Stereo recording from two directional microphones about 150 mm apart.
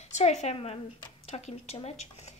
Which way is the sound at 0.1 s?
50° left (ahead or behind).